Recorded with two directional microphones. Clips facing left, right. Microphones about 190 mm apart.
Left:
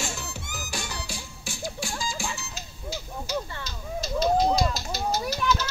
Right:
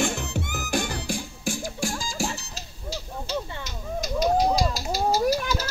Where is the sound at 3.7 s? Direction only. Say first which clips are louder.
Right 2 dB; 15° right (ahead or behind).